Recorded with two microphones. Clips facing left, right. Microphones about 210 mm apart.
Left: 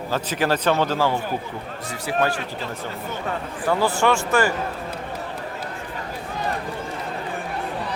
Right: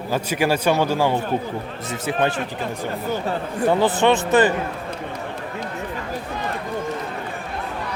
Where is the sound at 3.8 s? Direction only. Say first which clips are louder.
Right 3 dB; 20° right (ahead or behind).